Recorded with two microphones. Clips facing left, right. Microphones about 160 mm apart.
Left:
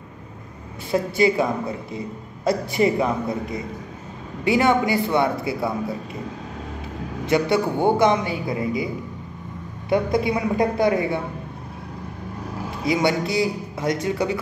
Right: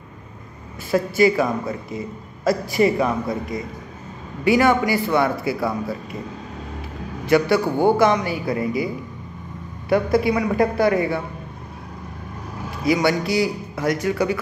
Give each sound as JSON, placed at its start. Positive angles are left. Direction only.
{"t": 0.9, "sound": "a man's voice", "side_deg": 25}
{"t": 7.2, "sound": "a man's voice", "side_deg": 20}
{"t": 9.8, "sound": "a man's voice", "side_deg": 20}
{"t": 12.8, "sound": "a man's voice", "side_deg": 20}